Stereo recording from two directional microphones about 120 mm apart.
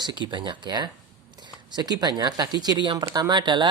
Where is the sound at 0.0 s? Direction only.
40° right (ahead or behind).